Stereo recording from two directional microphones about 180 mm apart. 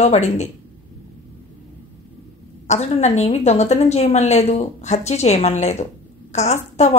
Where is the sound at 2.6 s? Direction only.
40° left (ahead or behind).